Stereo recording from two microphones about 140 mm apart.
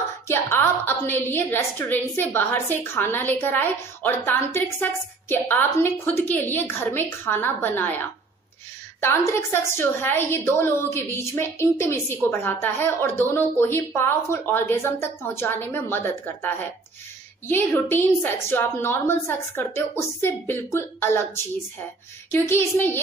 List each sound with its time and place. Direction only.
0.3 s a woman's voice: 15° left (ahead or behind)
22.3 s a woman's voice: 15° left (ahead or behind)